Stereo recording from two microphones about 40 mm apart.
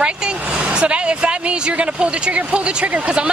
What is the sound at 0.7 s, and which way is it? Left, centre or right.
Speech, right.